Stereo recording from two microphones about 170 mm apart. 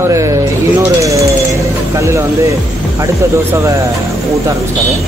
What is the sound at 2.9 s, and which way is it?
Speech, 15° right (ahead or behind).